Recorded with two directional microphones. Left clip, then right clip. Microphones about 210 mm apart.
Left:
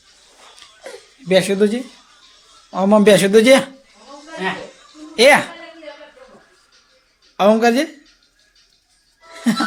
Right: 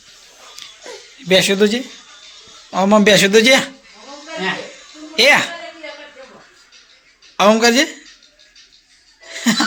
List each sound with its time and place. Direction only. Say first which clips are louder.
1.3 s a woman's voice: right 2 dB; 5° left (ahead or behind)
5.1 s a man's voice: left 1 dB; 10° left (ahead or behind)
7.3 s a woman's voice: right 2 dB; 5° left (ahead or behind)
9.3 s music: right 3 dB; 5° left (ahead or behind)